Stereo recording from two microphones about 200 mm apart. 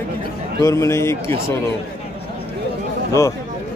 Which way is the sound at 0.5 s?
15° left (ahead or behind).